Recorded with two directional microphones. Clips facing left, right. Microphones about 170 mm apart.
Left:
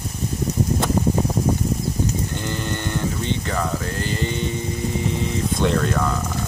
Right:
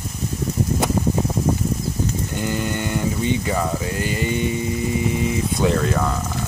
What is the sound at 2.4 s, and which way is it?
Speech, 10° right (ahead or behind).